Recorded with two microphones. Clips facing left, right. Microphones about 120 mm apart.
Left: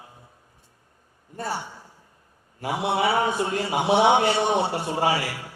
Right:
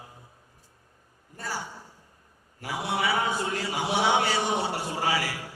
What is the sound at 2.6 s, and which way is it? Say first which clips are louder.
A man's voice: left 5 dB; 25° left (ahead or behind).